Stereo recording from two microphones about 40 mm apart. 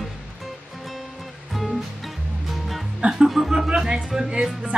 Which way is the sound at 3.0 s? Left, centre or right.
Right.